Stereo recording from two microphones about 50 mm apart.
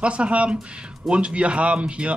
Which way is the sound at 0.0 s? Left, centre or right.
Right.